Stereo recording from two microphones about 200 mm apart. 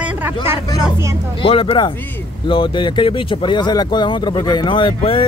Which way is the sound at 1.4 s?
25° left (ahead or behind).